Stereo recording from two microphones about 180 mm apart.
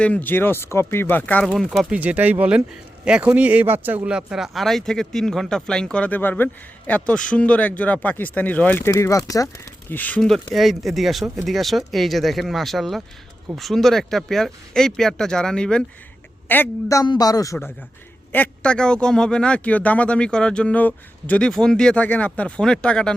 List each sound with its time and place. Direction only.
0.0 s speech: 10° left (ahead or behind)